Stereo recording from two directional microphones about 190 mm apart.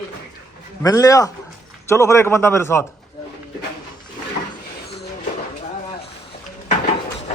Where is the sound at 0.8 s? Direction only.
20° left (ahead or behind).